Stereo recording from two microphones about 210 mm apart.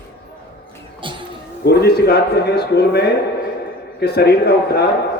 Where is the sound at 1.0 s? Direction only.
25° right (ahead or behind).